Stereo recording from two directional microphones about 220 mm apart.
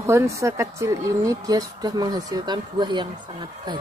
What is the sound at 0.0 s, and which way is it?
Speech, 10° right (ahead or behind).